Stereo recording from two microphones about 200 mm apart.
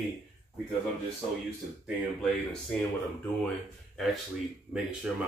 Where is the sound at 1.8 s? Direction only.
Centre (ahead or behind).